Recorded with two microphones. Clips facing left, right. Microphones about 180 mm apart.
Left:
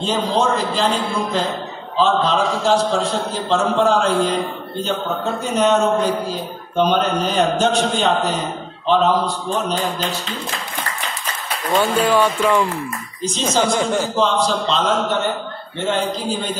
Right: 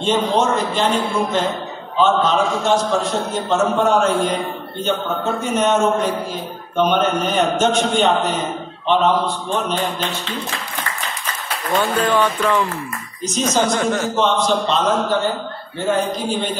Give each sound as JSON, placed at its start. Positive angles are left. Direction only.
{"t": 0.0, "sound": "a man's voice", "side_deg": 35}
{"t": 11.8, "sound": "speech", "side_deg": 10}
{"t": 13.2, "sound": "a man's voice", "side_deg": 30}
{"t": 15.8, "sound": "a man's voice", "side_deg": 30}